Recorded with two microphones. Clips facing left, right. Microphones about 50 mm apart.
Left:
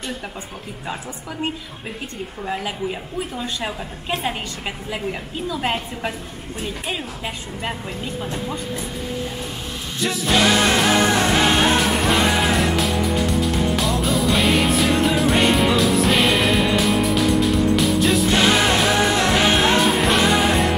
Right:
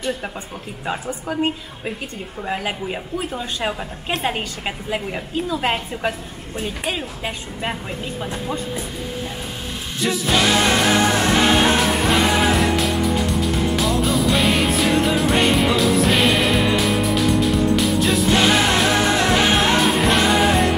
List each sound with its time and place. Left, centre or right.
4.2 s a woman's voice: centre
10.0 s music: centre